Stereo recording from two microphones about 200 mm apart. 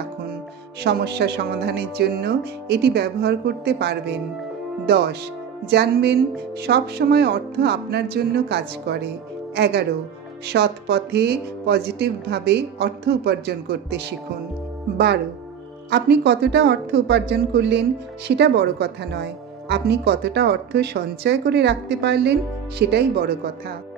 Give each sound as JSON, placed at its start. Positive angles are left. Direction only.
{"t": 0.8, "sound": "speech", "side_deg": -55}
{"t": 15.9, "sound": "speech", "side_deg": -55}